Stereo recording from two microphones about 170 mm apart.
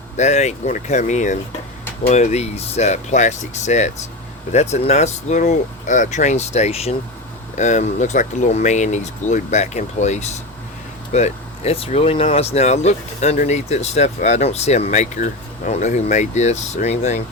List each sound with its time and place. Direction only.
0.2 s speech: 40° left (ahead or behind)